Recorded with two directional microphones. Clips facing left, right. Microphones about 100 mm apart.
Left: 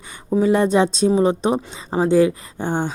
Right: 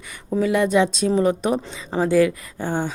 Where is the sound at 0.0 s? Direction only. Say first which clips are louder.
Left 4 dB; 25° left (ahead or behind).